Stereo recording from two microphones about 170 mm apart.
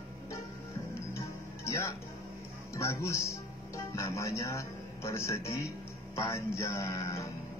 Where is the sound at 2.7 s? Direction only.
15° left (ahead or behind).